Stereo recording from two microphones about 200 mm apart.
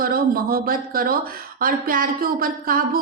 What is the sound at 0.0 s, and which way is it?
Speech, 45° right (ahead or behind).